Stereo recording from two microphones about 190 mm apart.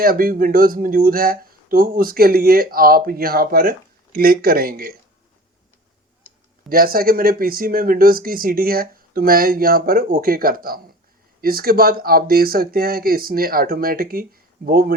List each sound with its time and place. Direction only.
0.0 s speech: 50° right (ahead or behind)
6.7 s speech: 50° right (ahead or behind)